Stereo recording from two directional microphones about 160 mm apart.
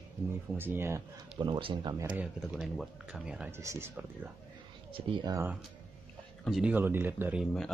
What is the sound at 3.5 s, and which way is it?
Speech, 15° right (ahead or behind).